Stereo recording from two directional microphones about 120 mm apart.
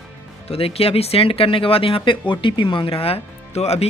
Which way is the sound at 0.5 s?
55° left (ahead or behind).